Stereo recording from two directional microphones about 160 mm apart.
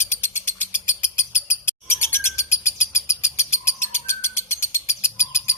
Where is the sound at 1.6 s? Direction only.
15° left (ahead or behind).